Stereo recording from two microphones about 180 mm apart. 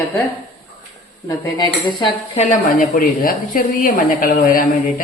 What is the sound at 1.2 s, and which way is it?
Speech, 20° left (ahead or behind).